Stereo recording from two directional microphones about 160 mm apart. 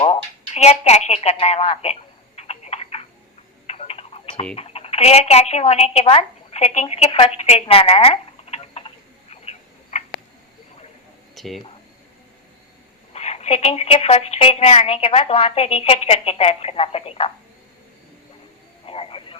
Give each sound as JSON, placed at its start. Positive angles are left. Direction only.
{"t": 0.0, "sound": "a sound", "side_deg": 40}
{"t": 3.7, "sound": "tick-tock", "side_deg": 40}
{"t": 4.5, "sound": "speech", "side_deg": 40}
{"t": 9.3, "sound": "frog", "side_deg": 40}
{"t": 11.3, "sound": "speech", "side_deg": 0}
{"t": 13.1, "sound": "a woman's voice", "side_deg": 40}
{"t": 18.9, "sound": "frog", "side_deg": 35}